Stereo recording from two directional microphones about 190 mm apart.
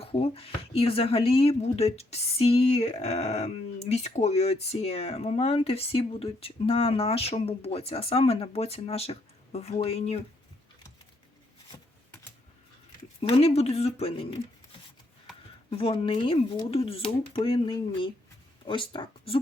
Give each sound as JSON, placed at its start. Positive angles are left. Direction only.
{"t": 0.0, "sound": "speech", "side_deg": 30}
{"t": 11.7, "sound": "a sound", "side_deg": 20}
{"t": 13.2, "sound": "speech", "side_deg": 30}
{"t": 15.7, "sound": "speech", "side_deg": 30}